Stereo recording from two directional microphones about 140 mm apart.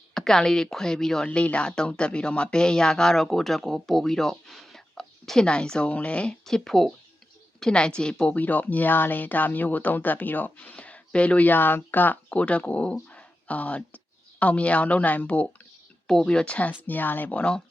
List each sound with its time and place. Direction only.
0.1 s a woman's voice: 5° left (ahead or behind)